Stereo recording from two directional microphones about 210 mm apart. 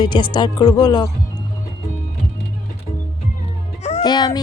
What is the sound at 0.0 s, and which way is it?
Child singing, 20° left (ahead or behind).